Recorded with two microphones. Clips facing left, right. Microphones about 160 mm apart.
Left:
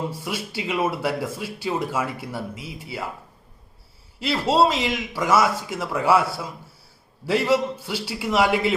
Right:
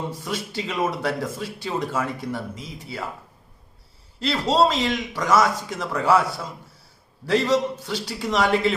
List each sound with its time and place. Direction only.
0.3 s speech: 10° left (ahead or behind)
4.2 s speech: 5° left (ahead or behind)